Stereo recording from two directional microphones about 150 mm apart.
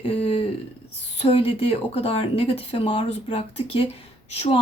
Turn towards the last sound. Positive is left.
turn(degrees=45)  # may be behind; listen again after turning